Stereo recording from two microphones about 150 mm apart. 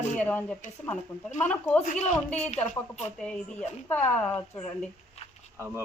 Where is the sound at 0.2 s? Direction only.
10° left (ahead or behind).